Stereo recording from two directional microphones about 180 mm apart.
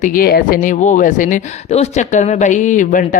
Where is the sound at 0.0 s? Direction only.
50° left (ahead or behind).